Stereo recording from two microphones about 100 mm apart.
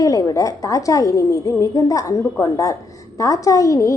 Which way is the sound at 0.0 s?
35° left (ahead or behind).